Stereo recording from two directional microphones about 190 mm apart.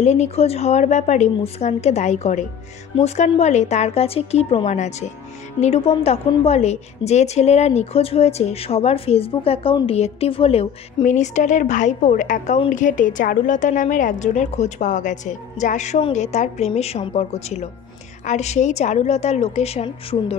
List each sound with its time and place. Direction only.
0.0 s a woman's voice: 35° left (ahead or behind)